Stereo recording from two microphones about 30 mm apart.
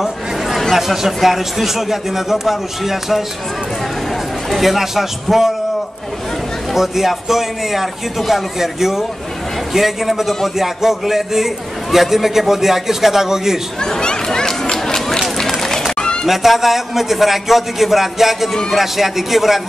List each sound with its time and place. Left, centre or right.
0.7 s a man's voice: centre
4.6 s a man's voice: centre
6.7 s a man's voice: centre
13.7 s speech: left
14.6 s run: left
15.0 s run: centre
15.9 s music: left
16.3 s a man's voice: centre